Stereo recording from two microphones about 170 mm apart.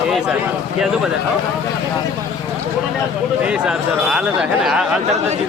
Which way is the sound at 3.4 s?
5° right (ahead or behind).